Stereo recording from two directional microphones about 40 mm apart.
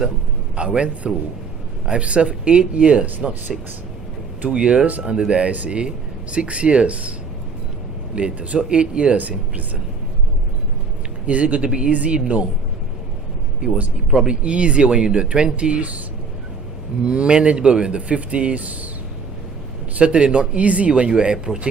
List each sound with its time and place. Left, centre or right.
0.5 s speech: right
4.4 s speech: right
5.5 s speech: right
8.1 s speech: right
9.1 s speech: right
11.3 s speech: right
14.1 s speech: right
17.1 s speech: right
20.0 s speech: right